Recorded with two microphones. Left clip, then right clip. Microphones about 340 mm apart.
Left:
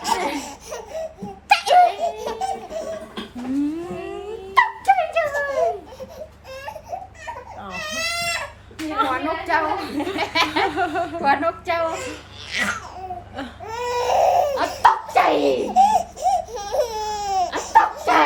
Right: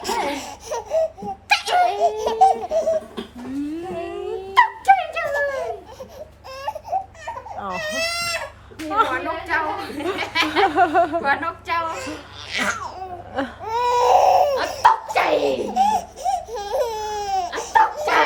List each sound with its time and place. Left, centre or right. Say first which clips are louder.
0.0 s laughter: left 1 dB; centre
0.7 s laughter: right 10 dB; centre
1.5 s laughter: left 4 dB; centre
2.0 s laughter: right 8 dB; centre
4.5 s a sound: right 2 dB; centre
7.6 s goat: right 2 dB; centre
8.9 s a sound: right 2 dB; centre
9.1 s a sound: left 1 dB; centre
10.8 s chuckle: right 6 dB; right
11.2 s a sound: left 2 dB; centre
12.5 s babbling: right 1 dB; centre
13.7 s crying: right 5 dB; centre